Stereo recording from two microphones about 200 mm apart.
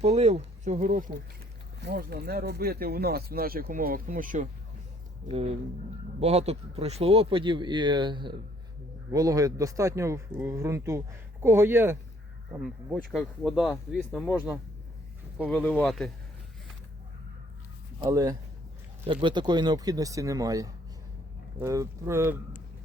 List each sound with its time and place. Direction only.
0.0 s speech: 35° right (ahead or behind)
1.8 s speech: 50° right (ahead or behind)
5.3 s speech: 30° right (ahead or behind); by 13.0 s 10° right (ahead or behind)
13.0 s speech: centre (ahead or behind)
15.4 s speech: 5° left (ahead or behind)
18.0 s speech: 15° right (ahead or behind)